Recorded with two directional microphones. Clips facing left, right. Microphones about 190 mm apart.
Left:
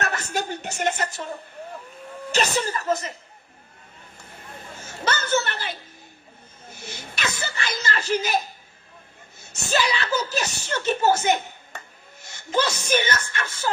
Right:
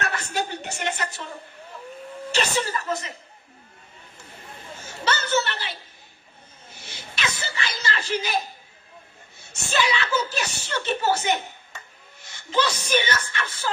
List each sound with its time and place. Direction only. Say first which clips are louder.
0.0 s speech: left 1 dB; 45° left (ahead or behind)
2.3 s speech: left 1 dB; 45° left (ahead or behind)
5.0 s speech: even; 45° left (ahead or behind)
6.7 s whimper: left 1 dB; 50° left (ahead or behind)
9.5 s speech: left 1 dB; 40° left (ahead or behind)